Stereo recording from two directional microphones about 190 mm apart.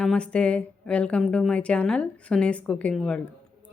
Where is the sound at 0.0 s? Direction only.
5° left (ahead or behind).